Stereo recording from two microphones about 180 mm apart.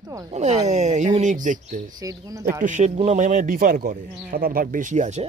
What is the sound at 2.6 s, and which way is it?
A man's voice, 40° right (ahead or behind).